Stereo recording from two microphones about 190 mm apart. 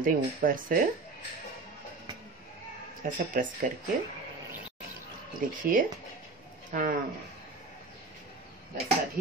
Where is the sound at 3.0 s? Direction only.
45° right (ahead or behind).